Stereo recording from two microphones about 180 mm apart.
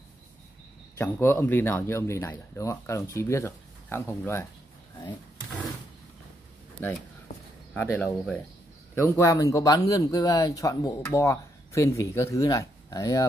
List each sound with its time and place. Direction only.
0.9 s speech: 10° left (ahead or behind)
6.8 s speech: 10° left (ahead or behind)